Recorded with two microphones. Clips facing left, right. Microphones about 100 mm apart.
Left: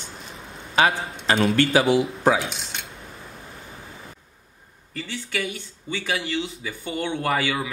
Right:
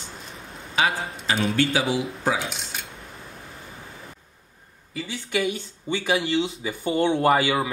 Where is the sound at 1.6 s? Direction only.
60° left (ahead or behind).